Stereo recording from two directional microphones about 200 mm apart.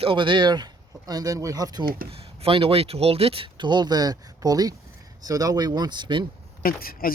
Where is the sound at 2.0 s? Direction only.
30° right (ahead or behind).